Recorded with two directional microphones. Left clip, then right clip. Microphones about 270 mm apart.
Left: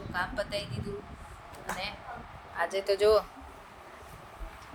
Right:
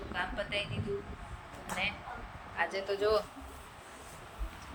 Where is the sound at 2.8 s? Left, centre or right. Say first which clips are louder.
Left 8 dB; left.